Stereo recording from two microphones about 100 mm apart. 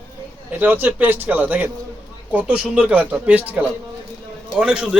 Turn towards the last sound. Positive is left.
turn(degrees=-10)  # may be behind; listen again after turning